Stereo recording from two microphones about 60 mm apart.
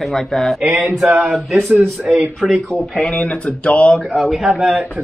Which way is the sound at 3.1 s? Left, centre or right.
Left.